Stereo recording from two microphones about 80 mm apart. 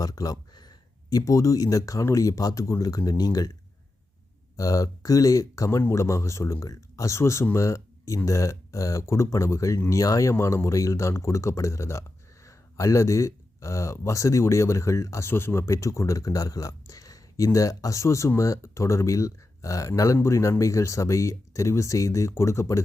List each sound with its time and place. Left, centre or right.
0.0 s a sound: left
1.1 s speech: left
4.5 s speech: left
15.3 s speech: left